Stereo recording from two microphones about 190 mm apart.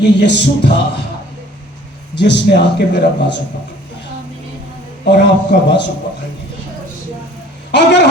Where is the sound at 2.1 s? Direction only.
65° left (ahead or behind).